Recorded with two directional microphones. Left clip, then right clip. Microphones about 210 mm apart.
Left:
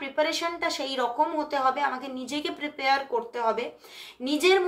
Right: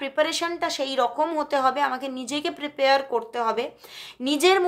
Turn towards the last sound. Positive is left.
turn(degrees=-40)  # may be behind; listen again after turning